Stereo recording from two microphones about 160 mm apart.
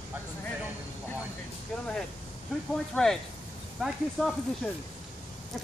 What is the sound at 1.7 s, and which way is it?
Vehicle, centre (ahead or behind).